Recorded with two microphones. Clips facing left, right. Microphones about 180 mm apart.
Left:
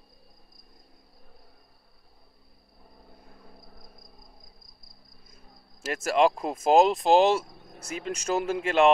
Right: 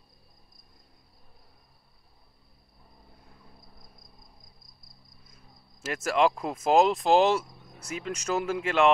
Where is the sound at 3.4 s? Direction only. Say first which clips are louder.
Left 4 dB; 60° left (ahead or behind).